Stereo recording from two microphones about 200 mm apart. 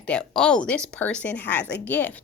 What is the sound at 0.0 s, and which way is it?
A woman's voice, 5° left (ahead or behind).